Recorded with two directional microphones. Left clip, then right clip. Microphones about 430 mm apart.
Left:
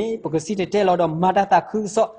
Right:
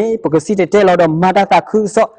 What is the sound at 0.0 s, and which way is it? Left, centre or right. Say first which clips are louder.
Speech: right 10 dB; right.